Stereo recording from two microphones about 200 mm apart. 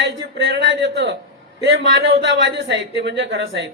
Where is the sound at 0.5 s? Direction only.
60° right (ahead or behind).